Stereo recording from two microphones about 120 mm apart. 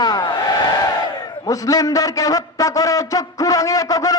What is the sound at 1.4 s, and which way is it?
A man's voice, 30° left (ahead or behind).